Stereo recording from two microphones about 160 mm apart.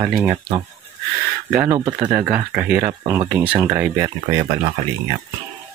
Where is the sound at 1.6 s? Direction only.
25° right (ahead or behind).